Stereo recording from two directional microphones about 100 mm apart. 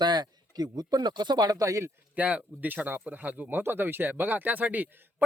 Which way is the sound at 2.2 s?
15° right (ahead or behind).